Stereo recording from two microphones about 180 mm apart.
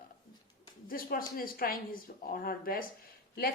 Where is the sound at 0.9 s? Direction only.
55° left (ahead or behind).